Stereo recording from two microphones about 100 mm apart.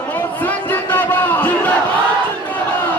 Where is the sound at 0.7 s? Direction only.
20° left (ahead or behind).